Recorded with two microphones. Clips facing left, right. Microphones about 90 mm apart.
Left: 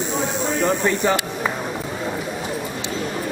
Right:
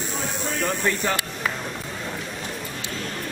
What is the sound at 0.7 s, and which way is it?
Speech, 20° left (ahead or behind).